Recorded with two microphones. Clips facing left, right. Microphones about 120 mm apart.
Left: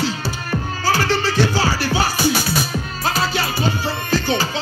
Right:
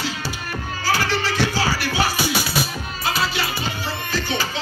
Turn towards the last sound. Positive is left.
turn(degrees=35)  # may be behind; listen again after turning